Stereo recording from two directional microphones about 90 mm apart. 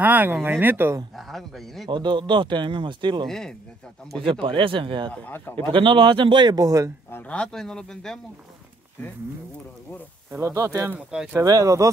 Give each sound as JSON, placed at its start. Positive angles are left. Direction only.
{"t": 0.0, "sound": "speech", "side_deg": -20}
{"t": 1.1, "sound": "speech", "side_deg": 0}
{"t": 1.9, "sound": "speech", "side_deg": -60}
{"t": 3.3, "sound": "speech", "side_deg": 5}
{"t": 4.2, "sound": "speech", "side_deg": -70}
{"t": 5.1, "sound": "a man's voice", "side_deg": 20}
{"t": 5.6, "sound": "a man's voice", "side_deg": -70}
{"t": 7.1, "sound": "speech", "side_deg": 20}
{"t": 7.3, "sound": "speech", "side_deg": 5}
{"t": 10.4, "sound": "speech", "side_deg": -35}
{"t": 11.0, "sound": "speech", "side_deg": -10}
{"t": 11.3, "sound": "speech", "side_deg": -40}